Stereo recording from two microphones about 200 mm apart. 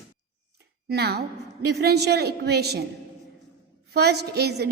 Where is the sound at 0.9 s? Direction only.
55° right (ahead or behind).